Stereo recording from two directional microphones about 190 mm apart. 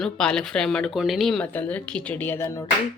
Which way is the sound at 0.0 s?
5° left (ahead or behind).